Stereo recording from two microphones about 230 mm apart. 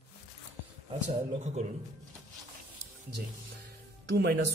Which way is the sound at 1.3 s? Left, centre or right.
Right.